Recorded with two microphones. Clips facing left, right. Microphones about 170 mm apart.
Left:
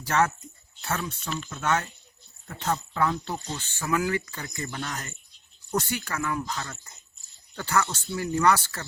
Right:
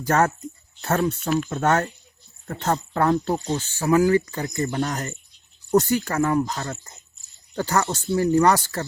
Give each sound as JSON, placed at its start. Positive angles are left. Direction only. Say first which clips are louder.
{"t": 0.0, "sound": "speech", "louder": "right 4 dB", "side_deg": -45}